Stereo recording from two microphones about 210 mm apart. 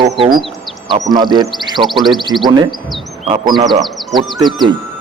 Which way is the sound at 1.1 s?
20° right (ahead or behind).